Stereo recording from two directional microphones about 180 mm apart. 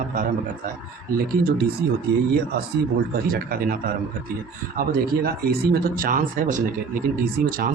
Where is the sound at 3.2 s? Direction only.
55° right (ahead or behind).